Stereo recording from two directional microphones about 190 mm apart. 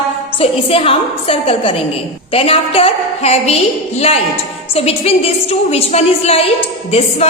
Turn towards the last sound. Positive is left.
turn(degrees=35)  # may be behind; listen again after turning